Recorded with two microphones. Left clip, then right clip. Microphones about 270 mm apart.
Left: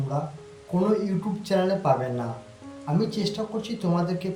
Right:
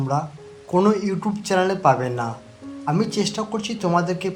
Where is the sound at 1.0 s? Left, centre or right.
Centre.